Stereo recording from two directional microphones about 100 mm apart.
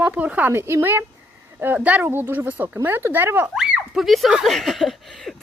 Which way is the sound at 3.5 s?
5° right (ahead or behind).